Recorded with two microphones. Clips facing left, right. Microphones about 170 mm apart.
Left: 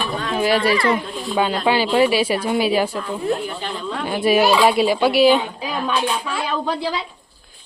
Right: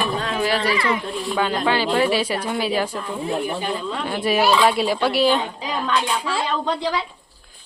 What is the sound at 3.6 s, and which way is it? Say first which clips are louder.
Speech: right 3 dB; 10° right (ahead or behind).